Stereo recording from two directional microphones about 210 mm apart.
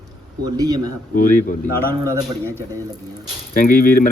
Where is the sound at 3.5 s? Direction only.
45° left (ahead or behind).